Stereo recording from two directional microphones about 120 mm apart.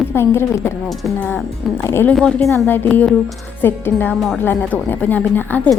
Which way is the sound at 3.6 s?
15° left (ahead or behind).